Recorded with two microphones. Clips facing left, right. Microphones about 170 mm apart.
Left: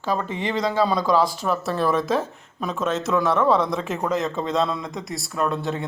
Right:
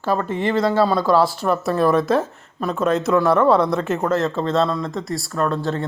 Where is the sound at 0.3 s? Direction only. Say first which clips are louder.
Right 5 dB; 50° right (ahead or behind).